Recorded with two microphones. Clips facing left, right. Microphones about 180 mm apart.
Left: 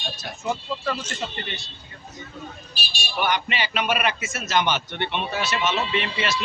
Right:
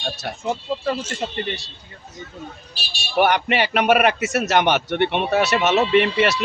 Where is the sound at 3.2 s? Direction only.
65° right (ahead or behind).